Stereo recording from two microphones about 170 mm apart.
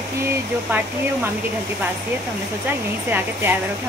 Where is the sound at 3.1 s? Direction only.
10° right (ahead or behind).